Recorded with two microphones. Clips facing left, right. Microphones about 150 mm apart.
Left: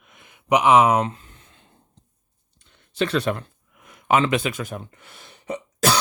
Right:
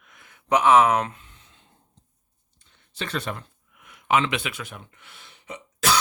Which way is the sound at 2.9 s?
65° left (ahead or behind).